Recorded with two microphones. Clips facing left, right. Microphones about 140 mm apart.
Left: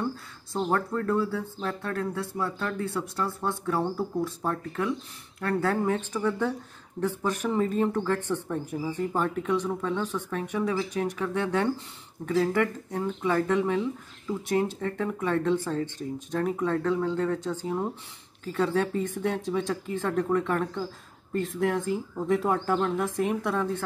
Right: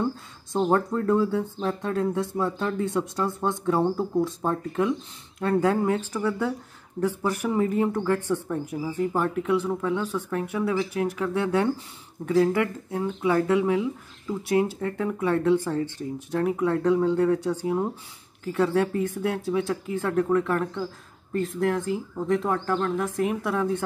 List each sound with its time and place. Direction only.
0.7 s speech: 20° right (ahead or behind)